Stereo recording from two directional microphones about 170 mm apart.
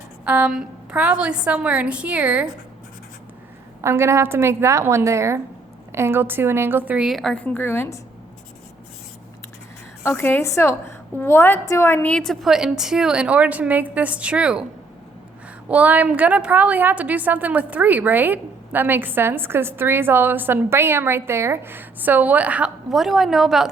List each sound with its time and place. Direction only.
0.3 s a woman's voice: 5° right (ahead or behind)
3.8 s a woman's voice: 15° right (ahead or behind); by 7.9 s 15° left (ahead or behind)
10.0 s a woman's voice: 15° left (ahead or behind); by 14.7 s 5° right (ahead or behind)
15.7 s a woman's voice: 10° right (ahead or behind)